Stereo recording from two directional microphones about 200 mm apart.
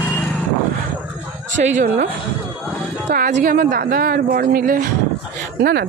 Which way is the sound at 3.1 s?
40° right (ahead or behind).